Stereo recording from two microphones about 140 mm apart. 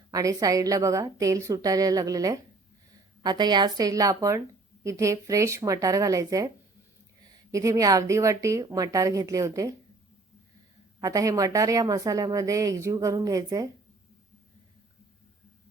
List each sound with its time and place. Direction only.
0.1 s speech: 25° right (ahead or behind)
7.5 s speech: 25° right (ahead or behind)
11.0 s speech: 25° right (ahead or behind)